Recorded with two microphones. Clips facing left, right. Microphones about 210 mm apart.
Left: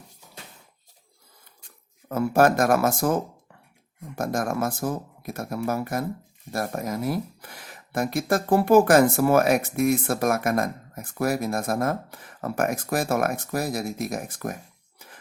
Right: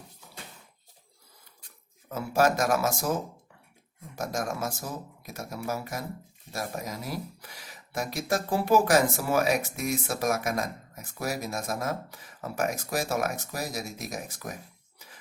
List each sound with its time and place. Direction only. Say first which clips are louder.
2.0 s speech: left 5 dB; 55° left (ahead or behind)
14.9 s music: left 5 dB; 55° left (ahead or behind)